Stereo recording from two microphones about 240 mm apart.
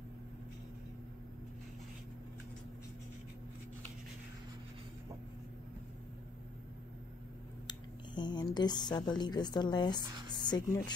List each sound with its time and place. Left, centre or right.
7.6 s speech: centre